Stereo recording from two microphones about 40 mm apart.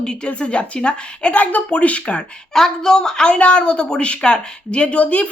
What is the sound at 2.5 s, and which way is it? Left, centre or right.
A woman's voice, centre.